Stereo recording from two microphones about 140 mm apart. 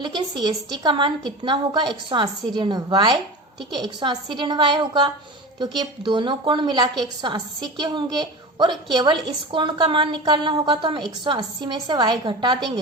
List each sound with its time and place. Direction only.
0.0 s a woman's voice: 30° right (ahead or behind)